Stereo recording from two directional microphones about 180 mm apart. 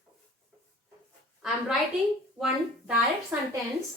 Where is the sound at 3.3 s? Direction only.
10° right (ahead or behind).